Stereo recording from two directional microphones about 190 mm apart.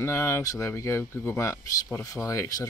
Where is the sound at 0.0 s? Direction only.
15° left (ahead or behind).